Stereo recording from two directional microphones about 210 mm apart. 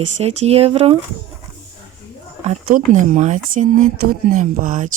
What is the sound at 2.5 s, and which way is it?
Speech, 40° right (ahead or behind).